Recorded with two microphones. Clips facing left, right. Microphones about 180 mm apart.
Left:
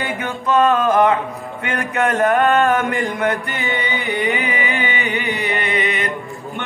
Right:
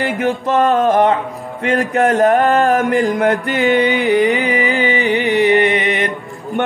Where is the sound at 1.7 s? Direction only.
40° right (ahead or behind).